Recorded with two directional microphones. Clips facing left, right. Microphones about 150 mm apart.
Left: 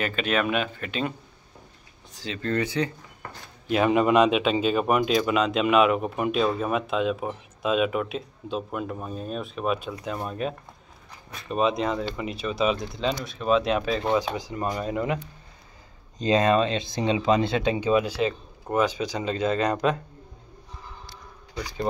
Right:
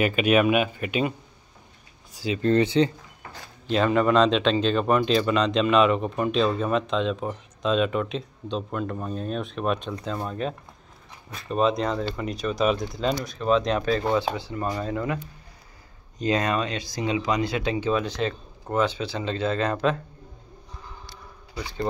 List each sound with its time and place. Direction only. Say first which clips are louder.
0.0 s speech: right 5 dB; 10° right (ahead or behind)
2.1 s speech: right 7 dB; 10° right (ahead or behind)
2.4 s speech: right 6 dB; 25° right (ahead or behind)
3.6 s speech: even; 10° left (ahead or behind)
16.2 s speech: left 4 dB; 20° left (ahead or behind)